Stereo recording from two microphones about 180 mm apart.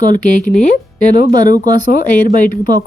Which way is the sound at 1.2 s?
50° left (ahead or behind).